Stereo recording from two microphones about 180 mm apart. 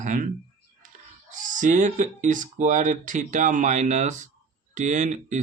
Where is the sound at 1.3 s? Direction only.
45° right (ahead or behind).